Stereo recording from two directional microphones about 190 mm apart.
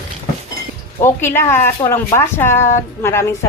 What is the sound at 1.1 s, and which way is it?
Speech, 10° left (ahead or behind).